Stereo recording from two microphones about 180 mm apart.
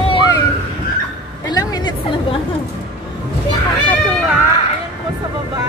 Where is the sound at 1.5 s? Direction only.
25° left (ahead or behind).